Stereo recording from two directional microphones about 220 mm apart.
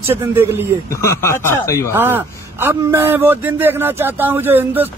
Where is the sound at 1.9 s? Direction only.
10° right (ahead or behind).